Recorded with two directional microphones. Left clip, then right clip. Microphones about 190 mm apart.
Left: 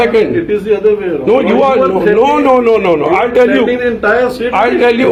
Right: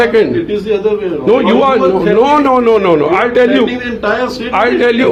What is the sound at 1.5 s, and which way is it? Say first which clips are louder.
A man's voice: even; 30° right (ahead or behind).